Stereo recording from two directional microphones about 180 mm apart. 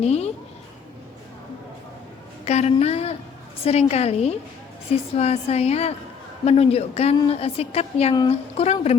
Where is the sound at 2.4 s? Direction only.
35° left (ahead or behind).